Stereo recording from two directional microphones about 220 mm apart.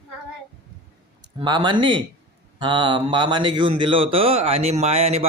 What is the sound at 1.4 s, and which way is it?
A man's voice, 20° right (ahead or behind).